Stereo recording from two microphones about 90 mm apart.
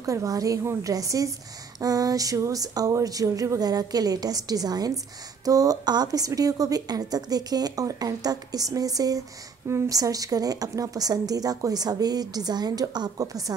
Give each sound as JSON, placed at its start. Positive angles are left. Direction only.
{"t": 0.0, "sound": "a woman's voice", "side_deg": -40}